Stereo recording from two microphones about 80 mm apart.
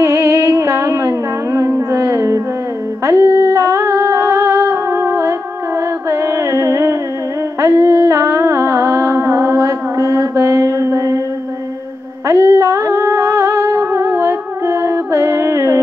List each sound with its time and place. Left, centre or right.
0.0 s music: right
1.9 s a sound: right
3.1 s humming: right
6.0 s carnatic music: right
7.6 s music: right
12.3 s music: right